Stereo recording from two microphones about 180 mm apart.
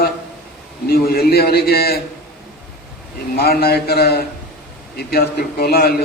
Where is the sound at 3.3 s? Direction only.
60° left (ahead or behind).